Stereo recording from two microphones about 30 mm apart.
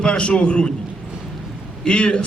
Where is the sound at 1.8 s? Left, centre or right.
Left.